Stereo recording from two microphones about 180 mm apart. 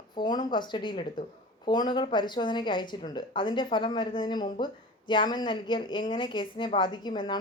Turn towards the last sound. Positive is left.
turn(degrees=25)  # may be behind; listen again after turning